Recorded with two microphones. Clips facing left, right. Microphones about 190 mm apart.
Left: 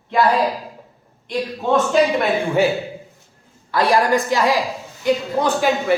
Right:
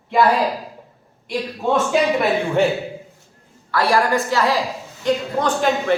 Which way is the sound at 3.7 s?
20° left (ahead or behind).